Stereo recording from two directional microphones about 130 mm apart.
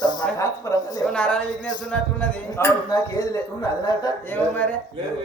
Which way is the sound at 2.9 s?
30° left (ahead or behind).